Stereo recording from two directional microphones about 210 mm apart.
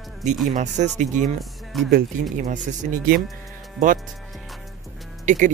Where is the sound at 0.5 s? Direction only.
35° right (ahead or behind).